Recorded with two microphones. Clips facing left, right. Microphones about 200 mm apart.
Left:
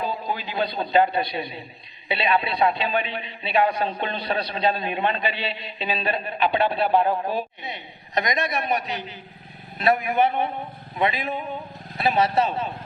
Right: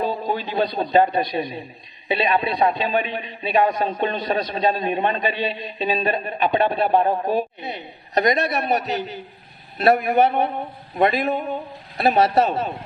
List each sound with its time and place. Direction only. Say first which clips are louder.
0.1 s a man's voice: right 4 dB; 20° right (ahead or behind)
1.0 s a man's voice: right 3 dB; 45° right (ahead or behind)